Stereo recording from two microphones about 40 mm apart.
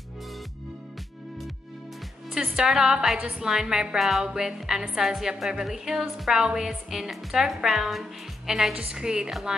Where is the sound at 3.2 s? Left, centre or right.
Right.